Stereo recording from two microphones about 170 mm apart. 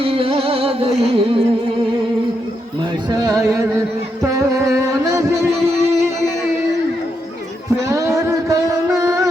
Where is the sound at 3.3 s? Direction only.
20° right (ahead or behind).